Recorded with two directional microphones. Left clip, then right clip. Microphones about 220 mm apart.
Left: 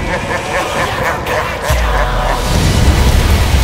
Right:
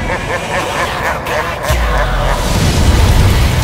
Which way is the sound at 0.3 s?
Centre (ahead or behind).